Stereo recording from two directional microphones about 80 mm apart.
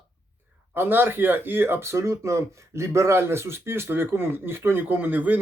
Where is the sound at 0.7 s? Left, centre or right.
Right.